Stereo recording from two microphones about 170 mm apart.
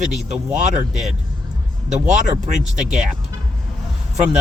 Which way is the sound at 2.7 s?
5° right (ahead or behind).